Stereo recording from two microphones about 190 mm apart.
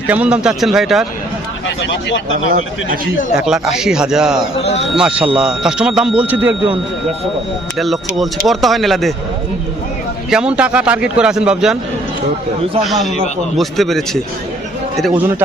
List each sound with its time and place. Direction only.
0.1 s speech: 5° right (ahead or behind)
1.6 s speech: 65° left (ahead or behind)
2.5 s a man's voice: 45° right (ahead or behind)
3.3 s speech: 5° right (ahead or behind)
4.6 s speech: 35° left (ahead or behind)
4.9 s speech: 5° right (ahead or behind)
7.8 s speech: centre (ahead or behind)
10.2 s speech: 5° right (ahead or behind)
12.8 s speech: centre (ahead or behind)